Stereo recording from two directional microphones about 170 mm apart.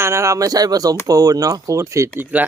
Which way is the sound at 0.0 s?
15° right (ahead or behind).